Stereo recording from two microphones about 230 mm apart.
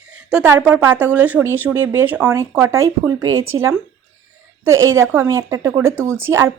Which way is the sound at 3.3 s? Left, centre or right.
Right.